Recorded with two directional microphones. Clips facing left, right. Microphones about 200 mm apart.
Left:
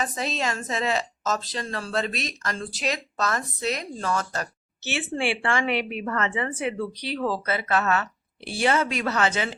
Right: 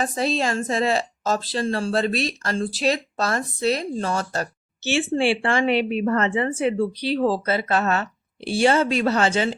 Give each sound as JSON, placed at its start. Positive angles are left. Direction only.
{"t": 0.0, "sound": "speech", "side_deg": -35}